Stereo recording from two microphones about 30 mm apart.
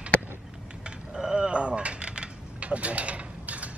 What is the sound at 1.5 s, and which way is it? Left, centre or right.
Mechanisms, right.